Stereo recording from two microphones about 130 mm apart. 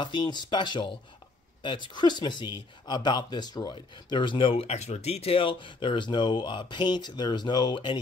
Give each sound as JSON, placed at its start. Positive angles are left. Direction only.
{"t": 0.0, "sound": "speech", "side_deg": 35}